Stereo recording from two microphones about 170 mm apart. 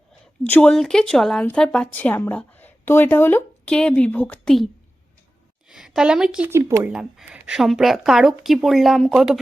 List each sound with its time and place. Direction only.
0.4 s a woman's voice: 10° left (ahead or behind)
6.5 s speech: 15° right (ahead or behind)
6.9 s speech: 5° right (ahead or behind)